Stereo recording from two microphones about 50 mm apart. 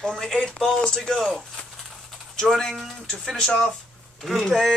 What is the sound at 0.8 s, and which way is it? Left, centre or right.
Speech, centre.